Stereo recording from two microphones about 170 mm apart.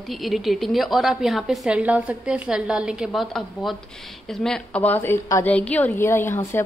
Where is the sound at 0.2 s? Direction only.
Centre (ahead or behind).